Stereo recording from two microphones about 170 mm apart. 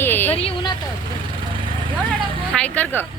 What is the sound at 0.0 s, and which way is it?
Vehicle, 10° left (ahead or behind).